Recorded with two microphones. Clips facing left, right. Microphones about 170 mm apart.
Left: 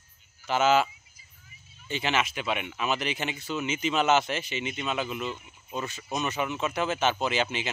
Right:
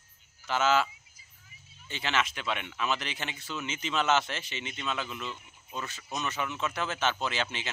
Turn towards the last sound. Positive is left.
turn(degrees=15)  # may be behind; listen again after turning